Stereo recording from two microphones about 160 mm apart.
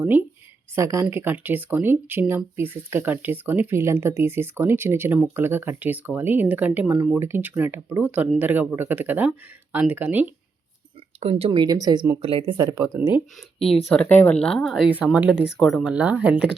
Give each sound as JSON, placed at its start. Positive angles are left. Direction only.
{"t": 0.0, "sound": "speech", "side_deg": -10}
{"t": 11.2, "sound": "speech", "side_deg": -40}
{"t": 12.8, "sound": "speech", "side_deg": -10}
{"t": 13.9, "sound": "speech", "side_deg": 10}